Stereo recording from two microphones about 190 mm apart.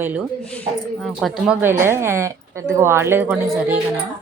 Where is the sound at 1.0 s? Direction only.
Centre (ahead or behind).